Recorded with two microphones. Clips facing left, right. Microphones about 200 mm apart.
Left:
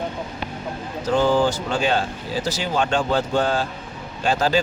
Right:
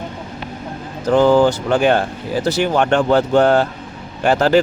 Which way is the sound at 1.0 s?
60° right (ahead or behind).